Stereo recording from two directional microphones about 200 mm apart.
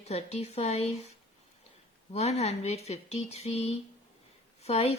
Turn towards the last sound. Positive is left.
turn(degrees=30)  # may be behind; listen again after turning